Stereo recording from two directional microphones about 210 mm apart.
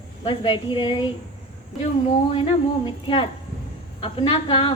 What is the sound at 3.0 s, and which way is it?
A woman's voice, 25° left (ahead or behind).